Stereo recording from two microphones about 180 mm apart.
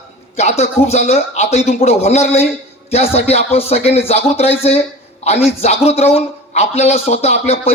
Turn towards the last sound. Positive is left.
turn(degrees=35)  # may be behind; listen again after turning